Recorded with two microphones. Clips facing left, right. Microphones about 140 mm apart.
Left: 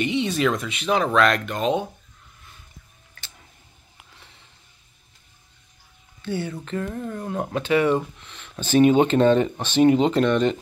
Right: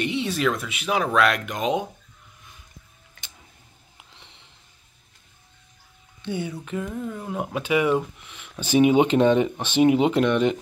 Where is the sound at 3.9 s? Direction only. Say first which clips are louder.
Even; 20° right (ahead or behind).